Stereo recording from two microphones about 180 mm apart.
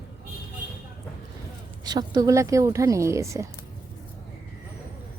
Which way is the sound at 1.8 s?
20° right (ahead or behind).